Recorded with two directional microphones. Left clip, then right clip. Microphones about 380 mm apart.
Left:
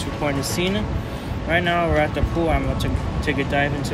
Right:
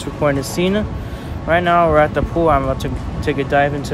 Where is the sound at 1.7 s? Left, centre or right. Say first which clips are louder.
Right 11 dB; right.